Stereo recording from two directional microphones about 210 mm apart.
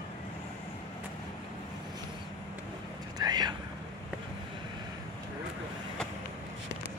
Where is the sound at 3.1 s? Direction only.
20° right (ahead or behind).